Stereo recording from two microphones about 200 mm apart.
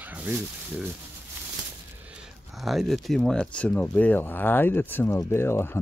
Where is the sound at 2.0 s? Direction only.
5° right (ahead or behind).